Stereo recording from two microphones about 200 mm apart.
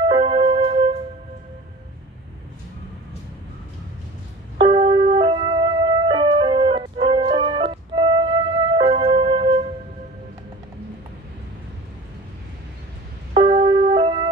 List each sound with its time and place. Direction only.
0.0 s music: 25° right (ahead or behind)
4.6 s music: 25° right (ahead or behind)
13.3 s music: 25° right (ahead or behind)